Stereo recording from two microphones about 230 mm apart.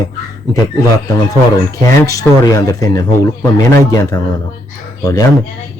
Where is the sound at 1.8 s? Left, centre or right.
Centre.